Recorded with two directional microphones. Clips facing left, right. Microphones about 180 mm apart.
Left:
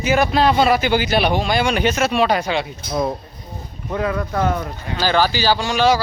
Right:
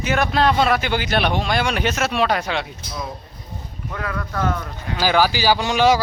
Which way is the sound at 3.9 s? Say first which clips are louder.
Left 7 dB; 20° left (ahead or behind).